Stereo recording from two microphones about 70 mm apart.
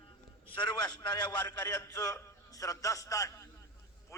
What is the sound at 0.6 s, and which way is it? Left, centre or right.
A man's voice, left.